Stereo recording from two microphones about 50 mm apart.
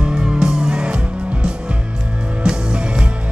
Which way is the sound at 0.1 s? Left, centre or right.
Centre.